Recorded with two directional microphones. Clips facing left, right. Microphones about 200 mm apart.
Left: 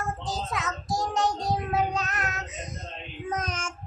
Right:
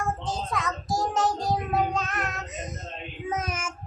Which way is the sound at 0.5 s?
Centre (ahead or behind).